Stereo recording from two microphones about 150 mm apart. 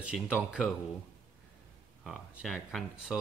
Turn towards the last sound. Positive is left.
turn(degrees=0)  # may be behind; listen again after turning